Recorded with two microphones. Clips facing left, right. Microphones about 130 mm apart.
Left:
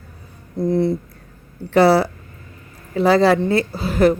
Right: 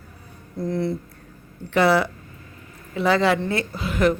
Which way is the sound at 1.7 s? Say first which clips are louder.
Left 5 dB; 35° left (ahead or behind).